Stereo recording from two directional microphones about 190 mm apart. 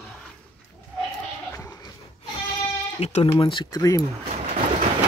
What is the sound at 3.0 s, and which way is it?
Speech, 35° left (ahead or behind).